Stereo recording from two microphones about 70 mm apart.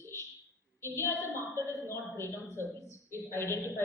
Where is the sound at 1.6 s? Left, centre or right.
Left.